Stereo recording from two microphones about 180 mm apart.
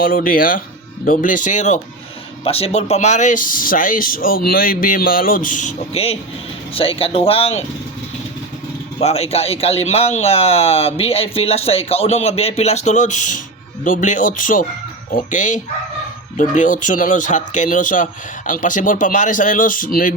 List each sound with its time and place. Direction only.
0.0 s speech: 50° left (ahead or behind); by 7.6 s 30° left (ahead or behind)
9.0 s speech: 35° left (ahead or behind); by 20.1 s 50° left (ahead or behind)